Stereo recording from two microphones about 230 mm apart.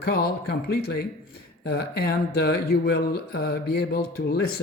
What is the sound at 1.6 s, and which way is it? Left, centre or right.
Speech, left.